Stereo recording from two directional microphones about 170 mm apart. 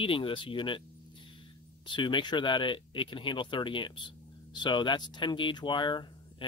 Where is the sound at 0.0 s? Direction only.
30° left (ahead or behind).